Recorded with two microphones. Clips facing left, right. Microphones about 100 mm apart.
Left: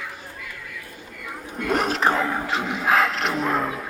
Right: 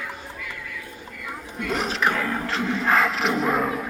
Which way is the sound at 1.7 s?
50° left (ahead or behind).